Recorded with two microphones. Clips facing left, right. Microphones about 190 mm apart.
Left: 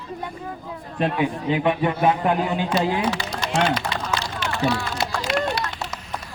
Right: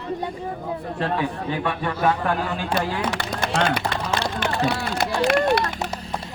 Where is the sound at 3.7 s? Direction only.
55° right (ahead or behind).